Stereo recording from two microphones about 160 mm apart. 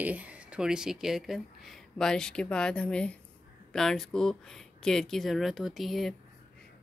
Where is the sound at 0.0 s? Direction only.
10° right (ahead or behind).